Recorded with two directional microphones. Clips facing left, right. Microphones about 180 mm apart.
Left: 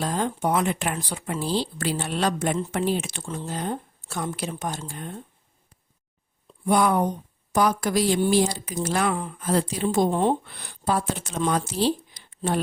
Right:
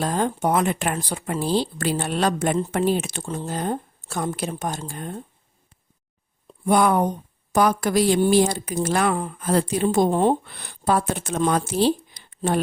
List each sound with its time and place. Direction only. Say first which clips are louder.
0.0 s speech: right 3 dB; 50° right (ahead or behind)
6.7 s speech: right 2 dB; 55° right (ahead or behind)